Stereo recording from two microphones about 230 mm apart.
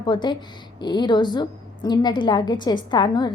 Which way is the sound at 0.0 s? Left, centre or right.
Centre.